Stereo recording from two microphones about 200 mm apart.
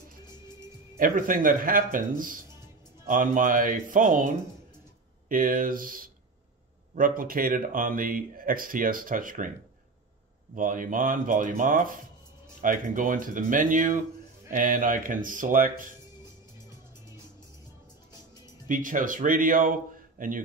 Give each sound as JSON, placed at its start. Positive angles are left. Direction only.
{"t": 0.9, "sound": "speech", "side_deg": -45}
{"t": 5.3, "sound": "speech", "side_deg": -45}
{"t": 10.5, "sound": "speech", "side_deg": -40}
{"t": 18.1, "sound": "music", "side_deg": 20}
{"t": 18.7, "sound": "speech", "side_deg": -40}